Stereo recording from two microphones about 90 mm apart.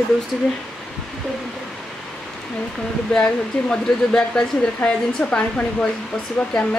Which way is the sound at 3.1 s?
10° left (ahead or behind).